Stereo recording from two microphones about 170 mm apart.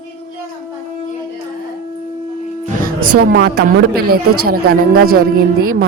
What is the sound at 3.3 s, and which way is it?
A man's voice, 80° right.